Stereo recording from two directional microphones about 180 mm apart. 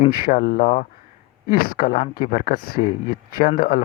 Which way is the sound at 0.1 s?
55° left (ahead or behind).